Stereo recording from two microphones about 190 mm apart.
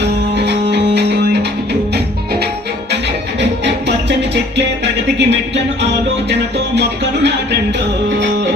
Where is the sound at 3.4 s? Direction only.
65° right (ahead or behind).